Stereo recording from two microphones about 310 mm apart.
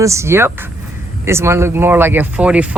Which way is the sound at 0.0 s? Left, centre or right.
Centre.